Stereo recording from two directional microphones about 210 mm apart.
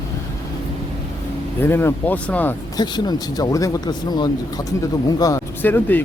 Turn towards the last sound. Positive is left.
turn(degrees=10)  # may be behind; listen again after turning